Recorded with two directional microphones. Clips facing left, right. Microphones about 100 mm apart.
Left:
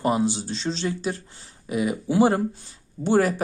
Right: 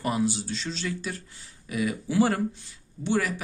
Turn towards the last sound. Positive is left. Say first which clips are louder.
# left 6 dB
turn(degrees=40)  # may be behind; listen again after turning